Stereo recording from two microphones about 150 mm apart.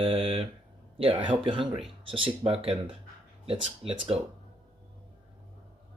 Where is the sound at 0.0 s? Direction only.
35° right (ahead or behind).